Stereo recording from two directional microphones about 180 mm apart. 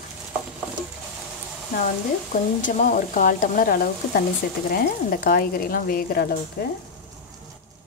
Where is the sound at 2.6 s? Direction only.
45° left (ahead or behind); by 6.7 s 60° left (ahead or behind).